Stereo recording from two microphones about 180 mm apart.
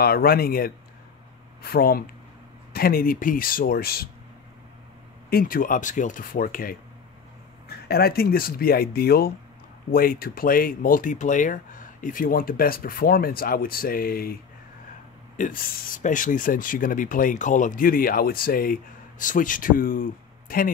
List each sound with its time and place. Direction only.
0.0 s speech: 55° left (ahead or behind)
5.3 s speech: 55° left (ahead or behind)